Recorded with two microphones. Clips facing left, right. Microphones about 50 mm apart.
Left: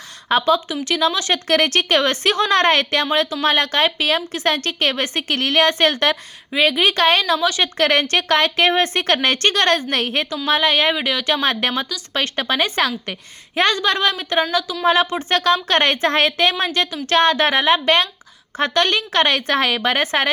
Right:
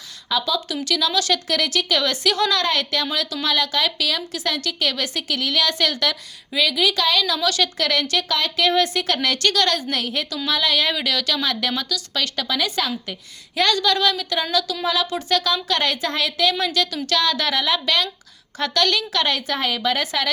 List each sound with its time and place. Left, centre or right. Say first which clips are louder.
0.3 s a woman's voice: left 6 dB; left
1.5 s a woman's voice: left 5 dB; left
7.3 s a woman's voice: left 2 dB; left
7.8 s a woman's voice: left 5 dB; left
10.2 s speech: left 4 dB; left
11.3 s speech: left 4 dB; left
13.6 s a woman's voice: left 2 dB; left
19.1 s a woman's voice: left 5 dB; left